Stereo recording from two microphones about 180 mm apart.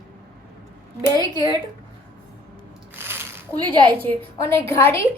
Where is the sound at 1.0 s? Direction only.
20° right (ahead or behind).